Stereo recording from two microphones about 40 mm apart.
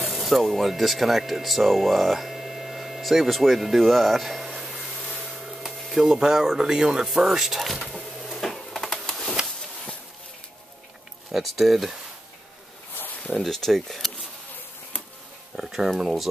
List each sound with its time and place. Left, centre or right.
0.0 s speech: centre
4.6 s vacuum cleaner: centre
5.3 s a sound: centre
6.0 s speech: centre
7.1 s speech: centre
8.2 s printer: centre
11.3 s speech: centre
13.3 s speech: centre
15.5 s speech: centre